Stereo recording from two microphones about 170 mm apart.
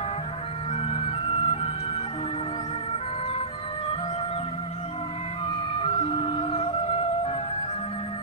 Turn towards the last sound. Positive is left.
turn(degrees=35)  # may be behind; listen again after turning